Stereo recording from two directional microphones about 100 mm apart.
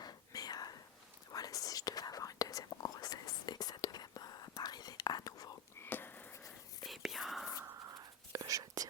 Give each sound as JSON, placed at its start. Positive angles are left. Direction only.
{"t": 0.0, "sound": "whispering", "side_deg": 40}
{"t": 5.8, "sound": "a sound", "side_deg": 20}
{"t": 6.8, "sound": "whispering", "side_deg": 0}
{"t": 7.9, "sound": "whispering", "side_deg": -35}